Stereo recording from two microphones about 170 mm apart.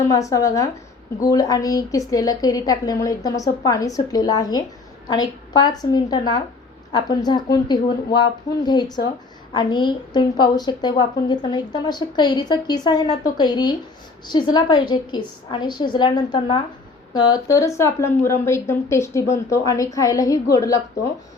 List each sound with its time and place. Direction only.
0.1 s a woman's voice: 20° left (ahead or behind)